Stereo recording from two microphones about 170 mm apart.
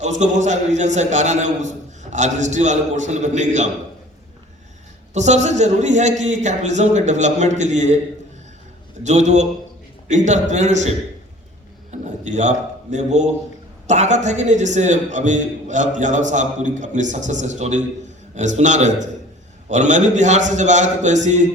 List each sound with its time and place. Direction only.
0.0 s a man's voice: 45° right (ahead or behind)
5.1 s a man's voice: 45° right (ahead or behind)
9.0 s a man's voice: 45° right (ahead or behind)
11.9 s a sound: 45° right (ahead or behind)
13.8 s a man's voice: 45° right (ahead or behind)